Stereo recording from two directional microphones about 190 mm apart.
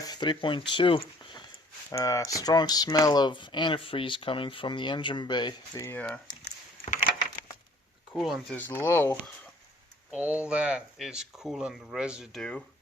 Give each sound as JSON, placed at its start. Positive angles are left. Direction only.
{"t": 0.0, "sound": "speech", "side_deg": 20}
{"t": 6.8, "sound": "a sound", "side_deg": 45}
{"t": 8.1, "sound": "speech", "side_deg": 0}
{"t": 8.5, "sound": "speech", "side_deg": 10}
{"t": 10.1, "sound": "speech", "side_deg": -5}